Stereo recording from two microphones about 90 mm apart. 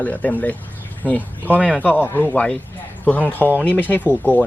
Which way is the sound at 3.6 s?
20° left (ahead or behind).